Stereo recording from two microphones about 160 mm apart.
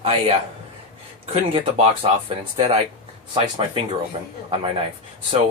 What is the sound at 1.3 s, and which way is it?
Speech, 40° right (ahead or behind).